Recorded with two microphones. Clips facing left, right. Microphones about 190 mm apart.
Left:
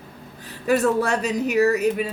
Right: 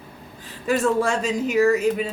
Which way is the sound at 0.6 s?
60° left (ahead or behind).